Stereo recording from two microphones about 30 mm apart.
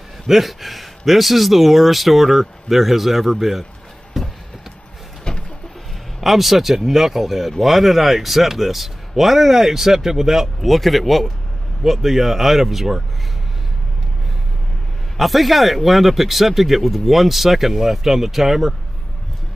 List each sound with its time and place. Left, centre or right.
0.3 s speech: centre
4.1 s a sound: centre
5.3 s bird: left
6.2 s speech: centre
10.6 s speech: centre
15.1 s speech: centre